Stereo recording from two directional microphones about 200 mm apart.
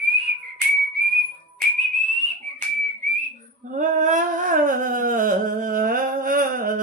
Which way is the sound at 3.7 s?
40° right (ahead or behind).